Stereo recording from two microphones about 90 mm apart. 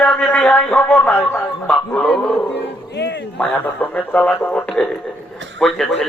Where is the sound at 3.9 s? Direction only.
20° left (ahead or behind).